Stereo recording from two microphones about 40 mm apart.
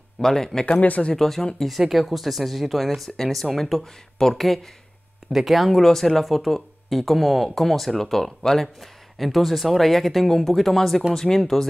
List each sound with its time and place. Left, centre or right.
0.2 s speech: centre
0.7 s speech: left
1.1 s speech: centre
1.8 s speech: centre